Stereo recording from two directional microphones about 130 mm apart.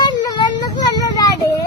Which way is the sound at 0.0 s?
30° left (ahead or behind).